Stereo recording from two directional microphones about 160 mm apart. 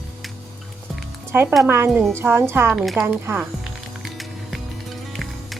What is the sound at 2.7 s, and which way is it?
Music, centre (ahead or behind).